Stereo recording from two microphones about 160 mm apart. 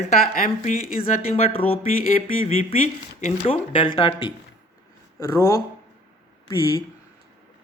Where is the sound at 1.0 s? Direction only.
45° left (ahead or behind).